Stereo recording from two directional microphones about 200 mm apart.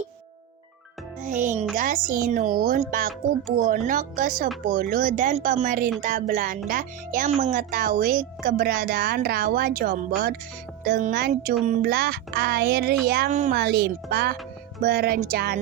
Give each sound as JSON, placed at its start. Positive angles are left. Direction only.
{"t": 1.2, "sound": "speech", "side_deg": -40}
{"t": 13.3, "sound": "speech", "side_deg": -35}
{"t": 13.6, "sound": "speech", "side_deg": -55}